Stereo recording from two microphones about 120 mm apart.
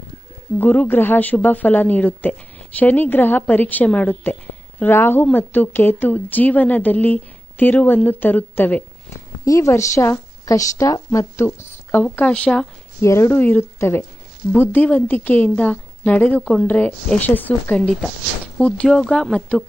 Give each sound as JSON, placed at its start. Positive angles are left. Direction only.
{"t": 0.6, "sound": "speech", "side_deg": 15}
{"t": 9.4, "sound": "a woman's voice", "side_deg": 25}
{"t": 13.0, "sound": "a woman's voice", "side_deg": 25}
{"t": 17.7, "sound": "speech", "side_deg": 5}